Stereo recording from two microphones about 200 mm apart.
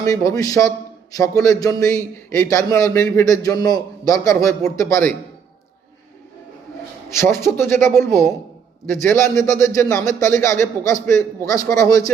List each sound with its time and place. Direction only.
0.0 s a man's voice: 15° left (ahead or behind)
7.1 s a man's voice: 15° left (ahead or behind)